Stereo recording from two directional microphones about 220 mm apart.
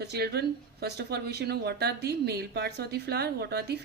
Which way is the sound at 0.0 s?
45° right (ahead or behind).